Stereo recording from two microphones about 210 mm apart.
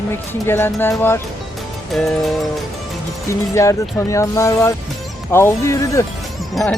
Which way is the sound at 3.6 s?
15° left (ahead or behind).